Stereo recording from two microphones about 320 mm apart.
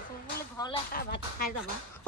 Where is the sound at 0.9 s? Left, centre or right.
Left.